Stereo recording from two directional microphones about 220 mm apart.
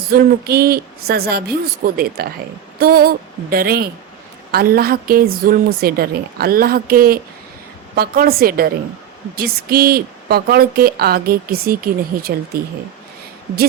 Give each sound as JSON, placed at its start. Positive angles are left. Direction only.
{"t": 0.1, "sound": "speech", "side_deg": -45}